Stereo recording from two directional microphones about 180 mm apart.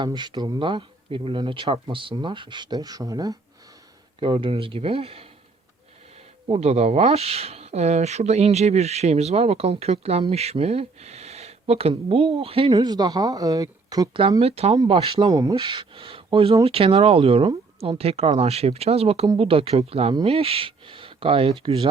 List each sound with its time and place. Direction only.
0.0 s speech: 25° right (ahead or behind)
6.5 s speech: 35° right (ahead or behind)
15.3 s speech: 20° right (ahead or behind)